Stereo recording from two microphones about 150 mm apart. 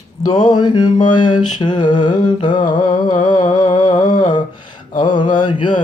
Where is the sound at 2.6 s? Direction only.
65° left (ahead or behind).